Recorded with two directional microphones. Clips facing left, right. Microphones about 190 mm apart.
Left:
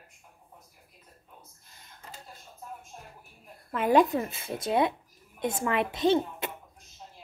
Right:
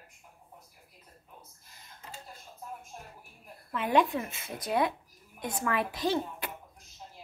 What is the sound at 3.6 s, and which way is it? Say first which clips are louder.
A woman's voice: left 4 dB; 45° left (ahead or behind).